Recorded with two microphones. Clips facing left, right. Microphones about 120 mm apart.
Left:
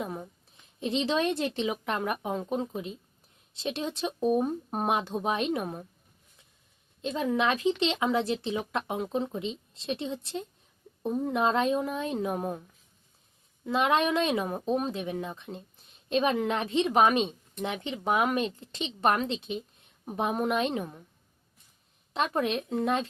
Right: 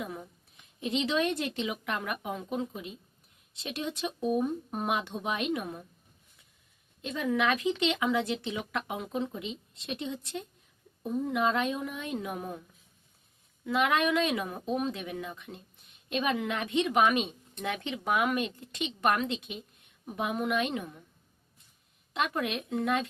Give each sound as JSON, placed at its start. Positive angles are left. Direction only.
{"t": 0.2, "sound": "a woman's voice", "side_deg": 25}
{"t": 7.0, "sound": "speech", "side_deg": 30}
{"t": 13.7, "sound": "speech", "side_deg": 30}
{"t": 17.6, "sound": "speech", "side_deg": 20}
{"t": 22.1, "sound": "speech", "side_deg": 30}